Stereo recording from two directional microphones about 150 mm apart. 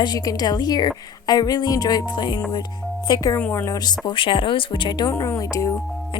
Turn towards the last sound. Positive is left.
turn(degrees=20)  # may be behind; listen again after turning